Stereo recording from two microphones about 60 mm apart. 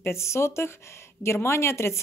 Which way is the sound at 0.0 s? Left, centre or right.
Left.